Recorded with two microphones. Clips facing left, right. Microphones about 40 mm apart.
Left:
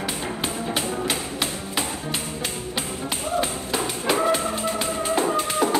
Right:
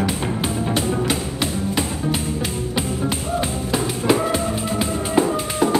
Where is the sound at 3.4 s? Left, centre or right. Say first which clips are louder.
Right 1 dB; centre.